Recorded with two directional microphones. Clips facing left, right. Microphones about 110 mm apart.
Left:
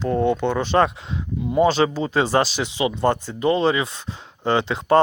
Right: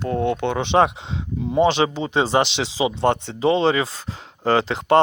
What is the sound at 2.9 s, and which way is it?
Speech, 70° right (ahead or behind).